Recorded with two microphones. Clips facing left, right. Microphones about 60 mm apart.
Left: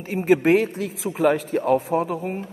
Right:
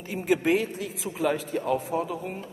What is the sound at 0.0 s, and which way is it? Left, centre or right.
Speech, left.